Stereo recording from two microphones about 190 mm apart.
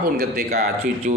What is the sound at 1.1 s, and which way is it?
Speech, 40° right (ahead or behind).